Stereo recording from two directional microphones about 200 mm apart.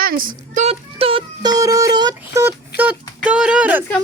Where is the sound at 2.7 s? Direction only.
55° left (ahead or behind).